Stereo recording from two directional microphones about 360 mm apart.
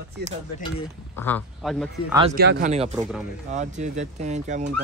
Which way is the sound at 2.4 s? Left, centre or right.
Right.